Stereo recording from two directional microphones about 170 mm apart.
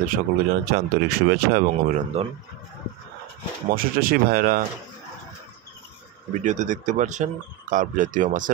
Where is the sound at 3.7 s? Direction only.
60° right (ahead or behind).